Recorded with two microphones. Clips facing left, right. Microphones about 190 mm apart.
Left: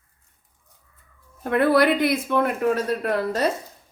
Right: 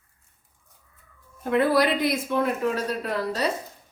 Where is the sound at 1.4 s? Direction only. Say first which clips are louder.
Left 3 dB; 60° left (ahead or behind).